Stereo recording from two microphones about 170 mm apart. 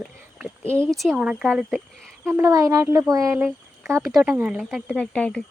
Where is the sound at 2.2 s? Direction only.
15° right (ahead or behind).